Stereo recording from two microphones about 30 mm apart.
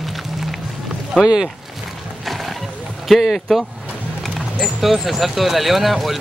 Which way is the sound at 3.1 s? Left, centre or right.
Centre.